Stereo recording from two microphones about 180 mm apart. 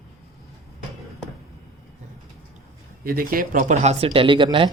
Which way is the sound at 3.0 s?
55° right (ahead or behind).